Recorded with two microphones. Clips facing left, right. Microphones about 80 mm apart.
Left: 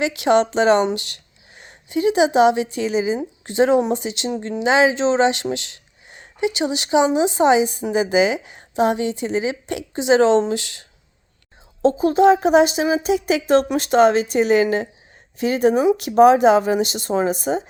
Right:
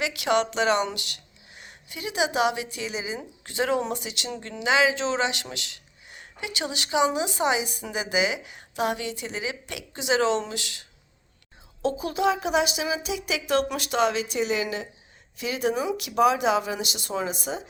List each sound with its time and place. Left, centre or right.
0.0 s speech: left